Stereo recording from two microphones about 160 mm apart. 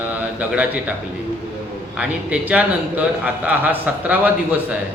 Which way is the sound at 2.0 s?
10° right (ahead or behind).